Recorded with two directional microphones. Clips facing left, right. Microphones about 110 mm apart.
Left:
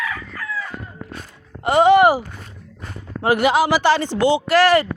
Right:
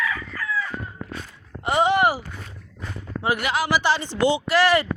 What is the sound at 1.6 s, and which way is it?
Speech, 60° left (ahead or behind).